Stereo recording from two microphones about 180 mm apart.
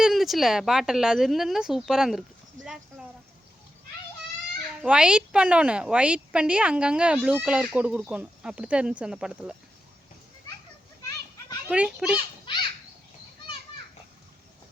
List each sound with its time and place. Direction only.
0.0 s speech: centre (ahead or behind)
4.8 s speech: 5° right (ahead or behind)
11.7 s a child's voice: 5° right (ahead or behind)
12.1 s children playing: 25° left (ahead or behind)